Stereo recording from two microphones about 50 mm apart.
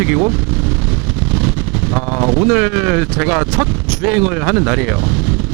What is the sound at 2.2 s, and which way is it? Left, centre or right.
Speech, right.